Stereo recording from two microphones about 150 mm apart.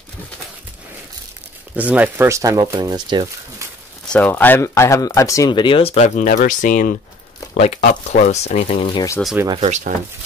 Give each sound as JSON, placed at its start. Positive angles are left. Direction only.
{"t": 1.8, "sound": "speech", "side_deg": -10}
{"t": 4.1, "sound": "speech", "side_deg": 10}
{"t": 7.5, "sound": "speech", "side_deg": 45}
{"t": 8.9, "sound": "speech", "side_deg": 20}
{"t": 9.6, "sound": "speech", "side_deg": -50}